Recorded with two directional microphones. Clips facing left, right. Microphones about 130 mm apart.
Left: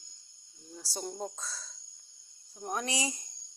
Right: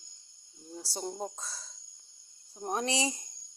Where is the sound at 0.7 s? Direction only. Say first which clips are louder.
Right 2 dB; 25° right (ahead or behind).